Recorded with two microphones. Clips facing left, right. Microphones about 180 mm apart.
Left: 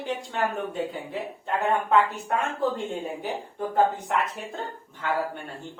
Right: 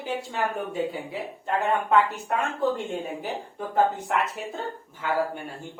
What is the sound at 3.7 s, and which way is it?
A woman's voice, centre (ahead or behind).